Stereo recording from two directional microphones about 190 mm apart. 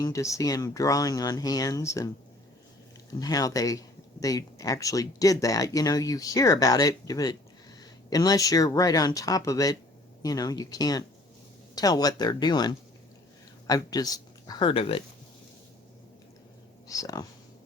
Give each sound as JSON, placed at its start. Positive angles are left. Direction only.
{"t": 0.0, "sound": "speech", "side_deg": 15}
{"t": 3.1, "sound": "speech", "side_deg": 20}
{"t": 16.9, "sound": "speech", "side_deg": 20}